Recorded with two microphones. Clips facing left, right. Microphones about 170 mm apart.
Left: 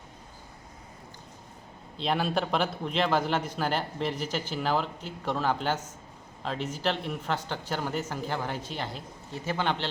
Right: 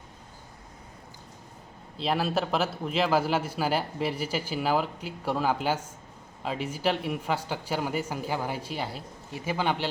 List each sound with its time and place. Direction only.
2.0 s a man's voice: 5° right (ahead or behind)